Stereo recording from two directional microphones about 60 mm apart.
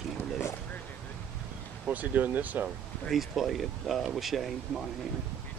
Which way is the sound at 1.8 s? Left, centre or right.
Right.